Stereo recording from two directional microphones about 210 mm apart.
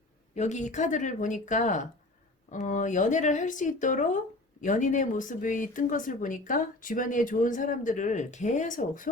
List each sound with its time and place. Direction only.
0.3 s speech: 35° left (ahead or behind)